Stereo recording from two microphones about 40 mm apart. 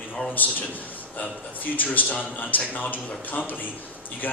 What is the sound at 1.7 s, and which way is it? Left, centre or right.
A man's voice, left.